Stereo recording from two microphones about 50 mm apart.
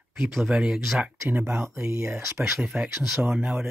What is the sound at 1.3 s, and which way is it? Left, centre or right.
Speech, right.